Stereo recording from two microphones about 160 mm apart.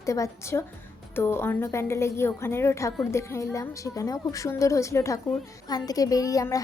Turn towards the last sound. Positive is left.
turn(degrees=20)  # may be behind; listen again after turning